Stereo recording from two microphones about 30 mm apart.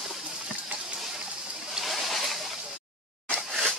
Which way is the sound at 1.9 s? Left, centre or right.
Centre.